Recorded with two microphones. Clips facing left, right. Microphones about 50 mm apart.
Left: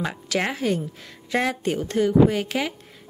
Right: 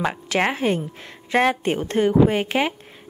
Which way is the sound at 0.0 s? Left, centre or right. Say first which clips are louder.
Right 4 dB; right.